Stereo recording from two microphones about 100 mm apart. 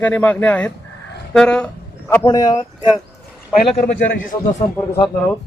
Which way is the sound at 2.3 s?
45° left (ahead or behind).